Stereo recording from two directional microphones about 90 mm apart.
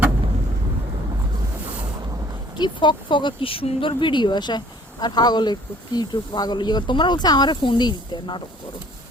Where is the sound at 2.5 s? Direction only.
55° left (ahead or behind).